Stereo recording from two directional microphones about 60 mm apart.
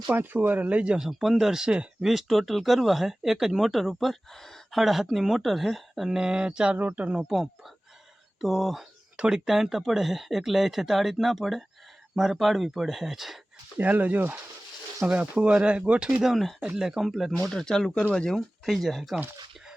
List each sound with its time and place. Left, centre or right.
0.1 s speech: right
0.9 s speech: centre
2.0 s speech: centre
6.7 s speech: right
7.3 s speech: centre
9.1 s speech: centre
9.5 s speech: centre
13.7 s speech: right
16.3 s speech: centre
17.5 s speech: centre